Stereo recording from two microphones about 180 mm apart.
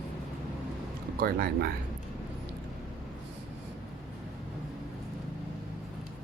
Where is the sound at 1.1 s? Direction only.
55° right (ahead or behind).